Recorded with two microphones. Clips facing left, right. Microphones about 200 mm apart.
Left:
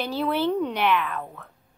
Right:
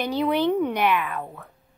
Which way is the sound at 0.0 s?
15° right (ahead or behind).